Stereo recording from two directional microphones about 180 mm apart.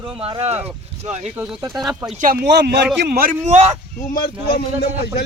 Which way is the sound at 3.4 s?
35° right (ahead or behind).